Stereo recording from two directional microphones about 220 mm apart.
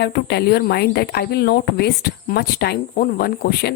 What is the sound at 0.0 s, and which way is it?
Speech, 50° left (ahead or behind).